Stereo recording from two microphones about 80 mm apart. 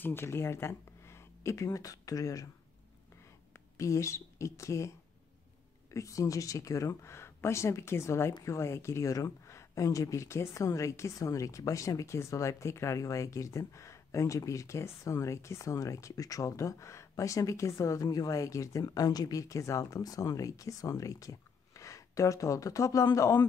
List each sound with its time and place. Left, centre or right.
0.0 s speech: left
3.7 s speech: left
5.9 s speech: left